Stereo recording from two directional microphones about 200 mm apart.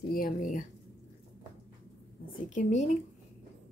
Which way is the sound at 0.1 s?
45° left (ahead or behind).